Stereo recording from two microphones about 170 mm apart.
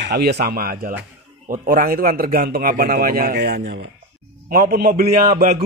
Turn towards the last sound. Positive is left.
turn(degrees=-60)  # may be behind; listen again after turning